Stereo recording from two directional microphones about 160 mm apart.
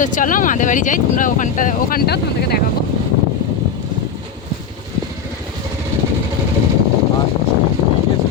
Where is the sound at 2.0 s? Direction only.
90° left.